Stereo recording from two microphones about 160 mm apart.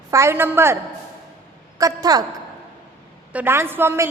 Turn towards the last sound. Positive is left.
turn(degrees=-15)  # may be behind; listen again after turning